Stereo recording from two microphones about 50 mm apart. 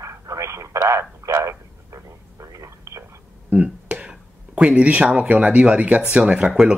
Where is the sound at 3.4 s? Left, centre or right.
Right.